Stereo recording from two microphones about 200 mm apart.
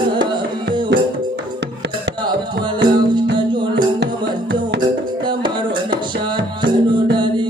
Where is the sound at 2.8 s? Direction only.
20° right (ahead or behind).